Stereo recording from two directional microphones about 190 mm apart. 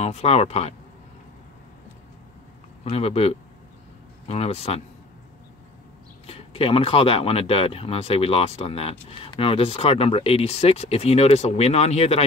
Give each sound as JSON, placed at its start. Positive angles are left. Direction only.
{"t": 0.0, "sound": "speech", "side_deg": 35}
{"t": 2.8, "sound": "speech", "side_deg": 30}
{"t": 6.2, "sound": "speech", "side_deg": 30}